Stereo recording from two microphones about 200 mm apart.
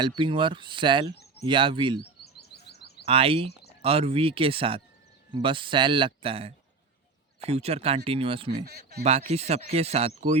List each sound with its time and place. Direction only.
0.2 s speech: 25° right (ahead or behind)
2.0 s chirp: 55° left (ahead or behind)
3.1 s speech: 30° right (ahead or behind)
3.5 s a sound: 55° left (ahead or behind)
3.8 s speech: 30° right (ahead or behind)
8.6 s a man's voice: 50° right (ahead or behind)
9.0 s speech: 30° right (ahead or behind)